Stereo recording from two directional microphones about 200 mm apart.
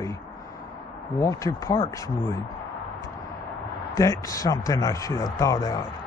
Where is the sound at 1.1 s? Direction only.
15° left (ahead or behind).